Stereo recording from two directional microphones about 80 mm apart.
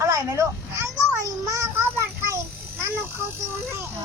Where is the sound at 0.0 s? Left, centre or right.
Right.